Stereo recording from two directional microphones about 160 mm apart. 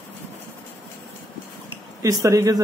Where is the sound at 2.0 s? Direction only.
20° right (ahead or behind).